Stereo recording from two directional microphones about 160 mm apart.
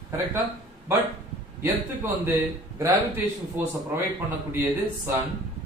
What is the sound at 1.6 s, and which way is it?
A man's voice, 15° right (ahead or behind).